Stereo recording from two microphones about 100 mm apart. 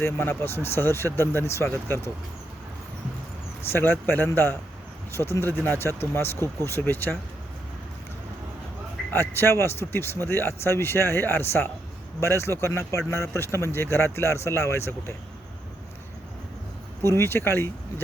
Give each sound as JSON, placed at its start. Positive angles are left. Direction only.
{"t": 0.0, "sound": "speech", "side_deg": 20}
{"t": 3.7, "sound": "speech", "side_deg": 20}
{"t": 9.1, "sound": "speech", "side_deg": 25}
{"t": 17.0, "sound": "speech", "side_deg": 25}